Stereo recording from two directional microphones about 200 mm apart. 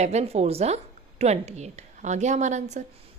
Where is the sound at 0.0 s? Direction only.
35° right (ahead or behind).